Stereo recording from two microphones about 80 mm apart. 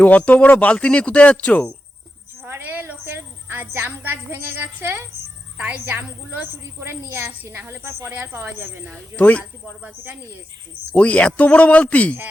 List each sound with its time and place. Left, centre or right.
0.0 s speech: centre
2.4 s a sound: right
5.8 s a woman's voice: right
9.1 s speech: left
10.9 s speech: centre